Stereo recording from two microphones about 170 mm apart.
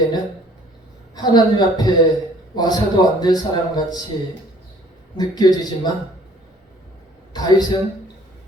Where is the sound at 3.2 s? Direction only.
25° left (ahead or behind).